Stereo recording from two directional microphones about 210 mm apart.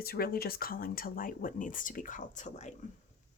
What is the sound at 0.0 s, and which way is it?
Speech, 45° left (ahead or behind).